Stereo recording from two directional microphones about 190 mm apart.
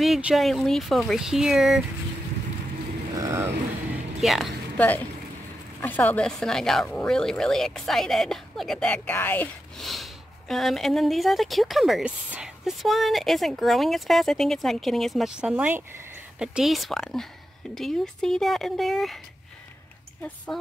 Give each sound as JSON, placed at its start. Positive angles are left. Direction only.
{"t": 0.0, "sound": "speech", "side_deg": 0}
{"t": 3.2, "sound": "a sound", "side_deg": -15}
{"t": 3.9, "sound": "music", "side_deg": 0}
{"t": 5.8, "sound": "speech", "side_deg": 10}